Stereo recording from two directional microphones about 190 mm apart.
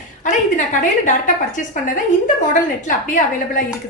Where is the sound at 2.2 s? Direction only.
40° left (ahead or behind).